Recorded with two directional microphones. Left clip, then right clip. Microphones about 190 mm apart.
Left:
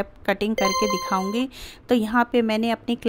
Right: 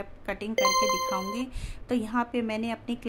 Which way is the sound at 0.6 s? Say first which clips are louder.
Right 2 dB; centre (ahead or behind).